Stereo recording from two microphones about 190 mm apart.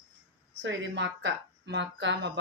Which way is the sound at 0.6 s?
70° right (ahead or behind).